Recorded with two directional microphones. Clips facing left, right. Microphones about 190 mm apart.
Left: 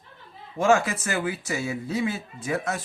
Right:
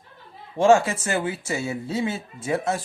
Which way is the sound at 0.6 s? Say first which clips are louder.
Right 4 dB; 30° right (ahead or behind).